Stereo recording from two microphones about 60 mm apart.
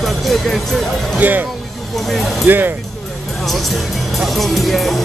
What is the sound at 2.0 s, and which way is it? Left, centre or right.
Speech, centre.